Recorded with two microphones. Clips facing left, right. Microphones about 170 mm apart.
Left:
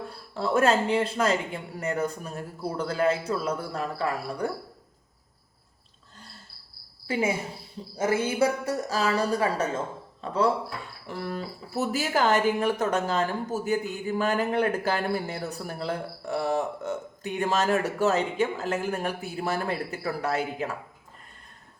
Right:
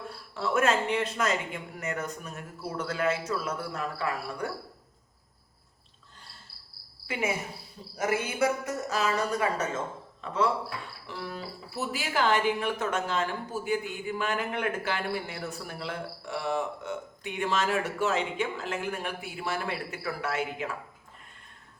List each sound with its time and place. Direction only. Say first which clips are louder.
0.1 s speech: left 3 dB; 35° left (ahead or behind)
7.1 s speech: left 4 dB; 30° left (ahead or behind)
11.0 s speech: left 7 dB; 45° left (ahead or behind)